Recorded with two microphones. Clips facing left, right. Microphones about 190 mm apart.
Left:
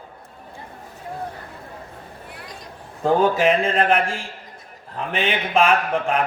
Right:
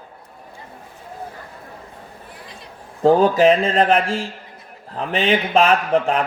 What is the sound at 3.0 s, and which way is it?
A man's voice, 35° right (ahead or behind).